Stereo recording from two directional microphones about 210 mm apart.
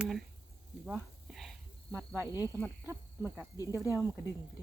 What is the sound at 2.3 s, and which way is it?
Speech, 15° left (ahead or behind).